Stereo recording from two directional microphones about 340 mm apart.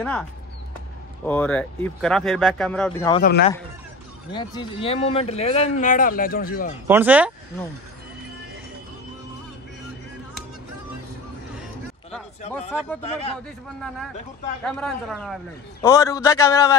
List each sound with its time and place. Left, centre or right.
1.2 s speech: centre
3.2 s speech: left
4.3 s speech: centre
6.9 s speech: centre
11.5 s a sound: centre
13.0 s speech: centre
13.7 s speech: centre